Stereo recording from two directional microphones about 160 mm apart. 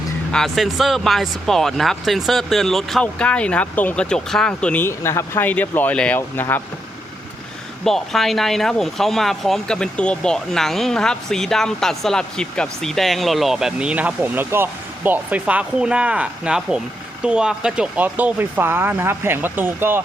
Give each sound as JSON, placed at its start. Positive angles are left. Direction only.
{"t": 0.3, "sound": "speech", "side_deg": 5}
{"t": 7.9, "sound": "speech", "side_deg": 0}